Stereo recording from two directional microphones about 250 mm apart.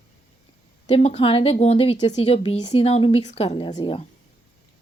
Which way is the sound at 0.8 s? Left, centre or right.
Left.